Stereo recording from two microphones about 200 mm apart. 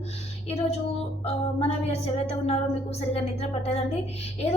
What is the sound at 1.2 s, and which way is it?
A woman's voice, 30° left (ahead or behind).